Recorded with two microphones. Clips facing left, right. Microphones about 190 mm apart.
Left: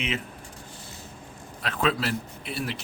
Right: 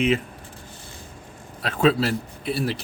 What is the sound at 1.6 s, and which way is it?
A man's voice, 35° right (ahead or behind).